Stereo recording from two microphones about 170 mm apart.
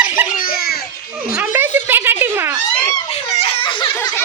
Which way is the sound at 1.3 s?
10° right (ahead or behind).